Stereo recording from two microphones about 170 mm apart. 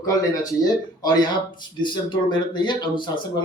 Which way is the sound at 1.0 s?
25° left (ahead or behind).